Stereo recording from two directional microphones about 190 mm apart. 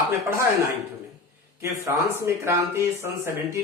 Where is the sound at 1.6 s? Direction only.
15° right (ahead or behind).